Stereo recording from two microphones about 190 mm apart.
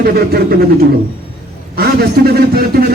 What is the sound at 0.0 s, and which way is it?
Speech, 55° right (ahead or behind).